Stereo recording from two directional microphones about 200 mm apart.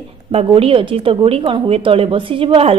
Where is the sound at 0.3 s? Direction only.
30° right (ahead or behind).